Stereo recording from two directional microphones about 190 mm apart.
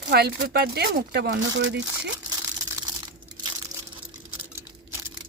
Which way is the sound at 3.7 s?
20° right (ahead or behind).